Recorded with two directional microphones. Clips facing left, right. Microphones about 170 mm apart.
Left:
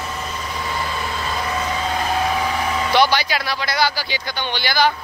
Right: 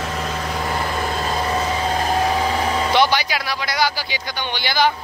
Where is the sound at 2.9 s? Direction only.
15° right (ahead or behind).